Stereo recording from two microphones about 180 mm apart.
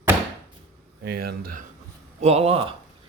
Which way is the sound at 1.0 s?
60° right (ahead or behind).